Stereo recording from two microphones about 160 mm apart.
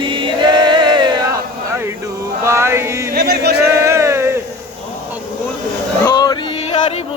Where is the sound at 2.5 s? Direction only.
15° right (ahead or behind).